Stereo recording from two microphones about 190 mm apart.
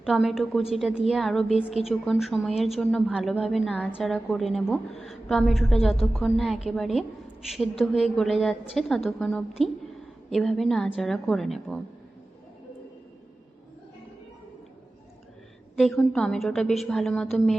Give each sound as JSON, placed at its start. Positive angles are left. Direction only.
{"t": 0.0, "sound": "a woman's voice", "side_deg": 0}
{"t": 15.7, "sound": "a woman's voice", "side_deg": 0}